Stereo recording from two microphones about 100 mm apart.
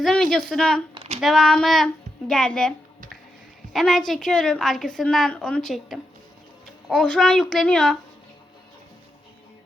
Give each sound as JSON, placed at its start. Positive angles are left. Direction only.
{"t": 0.0, "sound": "a woman's voice", "side_deg": 5}
{"t": 0.9, "sound": "a sound", "side_deg": -90}
{"t": 1.2, "sound": "a child's voice", "side_deg": 0}